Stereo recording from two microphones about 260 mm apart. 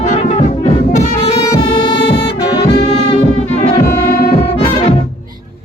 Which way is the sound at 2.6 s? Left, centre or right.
Left.